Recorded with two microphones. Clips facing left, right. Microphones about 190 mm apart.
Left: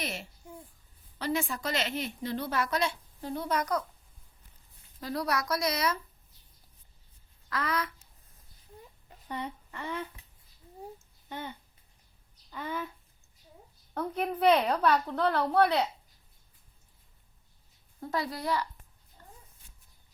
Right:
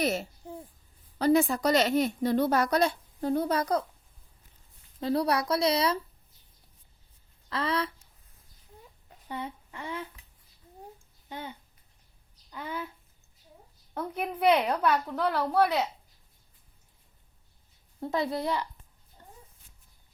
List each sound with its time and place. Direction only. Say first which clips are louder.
0.0 s a sound: right 9 dB; 40° right (ahead or behind)
1.2 s a woman's voice: right 9 dB; 40° right (ahead or behind)
3.5 s speech: right 3 dB; 30° right (ahead or behind)
4.9 s speech: right 5 dB; 30° right (ahead or behind)
7.5 s speech: right 3 dB; 30° right (ahead or behind)
9.0 s a sound: even; 10° right (ahead or behind)
11.3 s a child's voice: even; 10° right (ahead or behind)
13.9 s a woman's voice: left 1 dB; 10° right (ahead or behind)
18.0 s speech: right 4 dB; 20° right (ahead or behind)
19.2 s a sound: right 1 dB; 20° right (ahead or behind)